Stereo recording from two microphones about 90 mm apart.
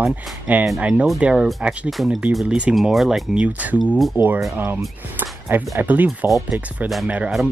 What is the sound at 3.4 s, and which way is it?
Speech, 15° right (ahead or behind).